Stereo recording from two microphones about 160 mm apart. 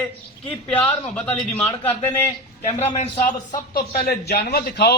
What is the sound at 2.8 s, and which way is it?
Speech, 45° left (ahead or behind).